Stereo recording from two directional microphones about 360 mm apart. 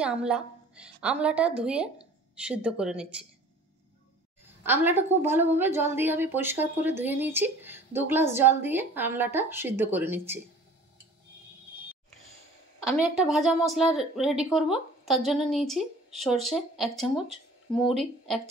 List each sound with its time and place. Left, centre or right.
0.0 s a woman's voice: centre
4.6 s a woman's voice: centre
12.9 s a woman's voice: centre